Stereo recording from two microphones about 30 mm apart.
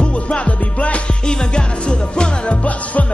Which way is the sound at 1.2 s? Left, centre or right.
Left.